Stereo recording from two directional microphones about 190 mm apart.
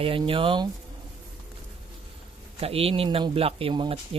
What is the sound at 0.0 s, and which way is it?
Speech, 30° right (ahead or behind).